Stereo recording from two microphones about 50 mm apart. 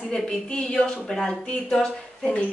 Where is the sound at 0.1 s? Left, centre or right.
Centre.